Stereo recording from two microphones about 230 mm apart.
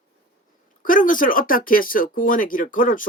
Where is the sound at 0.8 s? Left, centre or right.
Left.